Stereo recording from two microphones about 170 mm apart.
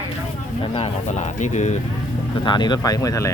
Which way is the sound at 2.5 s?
25° left (ahead or behind).